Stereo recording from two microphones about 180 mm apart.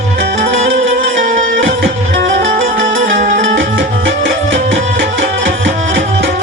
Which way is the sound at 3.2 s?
50° right (ahead or behind).